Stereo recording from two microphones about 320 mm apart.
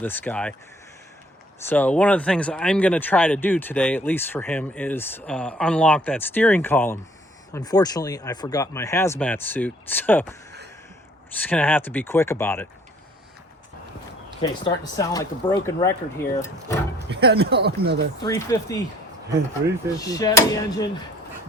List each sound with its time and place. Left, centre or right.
0.0 s speech: centre
1.7 s speech: centre
11.3 s speech: centre
14.4 s speech: centre
17.1 s speech: right
18.3 s speech: centre
20.0 s speech: centre